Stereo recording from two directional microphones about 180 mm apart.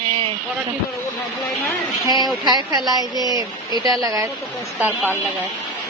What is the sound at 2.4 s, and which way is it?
Speech, 25° right (ahead or behind).